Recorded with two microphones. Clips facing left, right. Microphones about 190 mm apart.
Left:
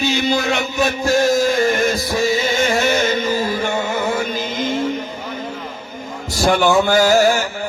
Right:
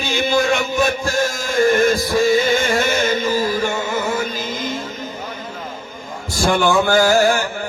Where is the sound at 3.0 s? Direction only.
45° right (ahead or behind).